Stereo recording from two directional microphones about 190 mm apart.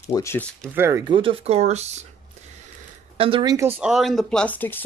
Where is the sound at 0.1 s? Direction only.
15° left (ahead or behind).